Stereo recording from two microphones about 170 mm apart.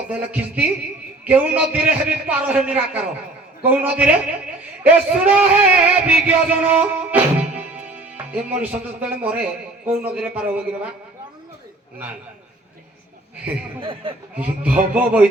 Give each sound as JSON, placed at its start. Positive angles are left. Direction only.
{"t": 0.1, "sound": "speech", "side_deg": -5}
{"t": 13.7, "sound": "speech", "side_deg": -30}
{"t": 14.3, "sound": "speech", "side_deg": -10}